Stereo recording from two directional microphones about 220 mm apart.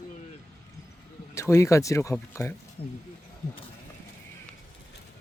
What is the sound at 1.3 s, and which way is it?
Speech, 15° left (ahead or behind).